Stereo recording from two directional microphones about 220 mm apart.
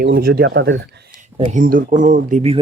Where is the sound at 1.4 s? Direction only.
35° right (ahead or behind).